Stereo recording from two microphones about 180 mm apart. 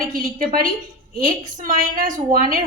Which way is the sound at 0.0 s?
50° right (ahead or behind).